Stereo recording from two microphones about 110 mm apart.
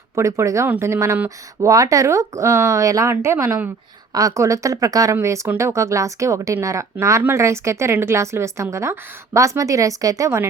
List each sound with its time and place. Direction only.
0.2 s speech: 25° right (ahead or behind)